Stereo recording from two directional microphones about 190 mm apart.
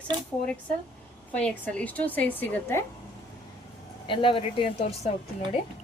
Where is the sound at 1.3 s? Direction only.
5° left (ahead or behind).